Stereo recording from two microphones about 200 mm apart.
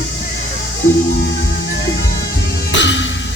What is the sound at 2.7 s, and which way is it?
Music, 65° left (ahead or behind).